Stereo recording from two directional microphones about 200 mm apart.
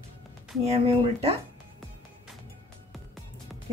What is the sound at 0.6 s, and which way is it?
Speech, 30° right (ahead or behind).